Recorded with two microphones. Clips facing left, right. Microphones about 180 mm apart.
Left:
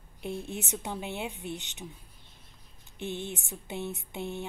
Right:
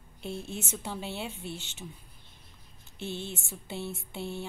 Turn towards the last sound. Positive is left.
turn(degrees=20)  # may be behind; listen again after turning